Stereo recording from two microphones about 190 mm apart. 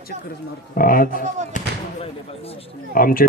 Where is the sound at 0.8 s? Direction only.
50° left (ahead or behind).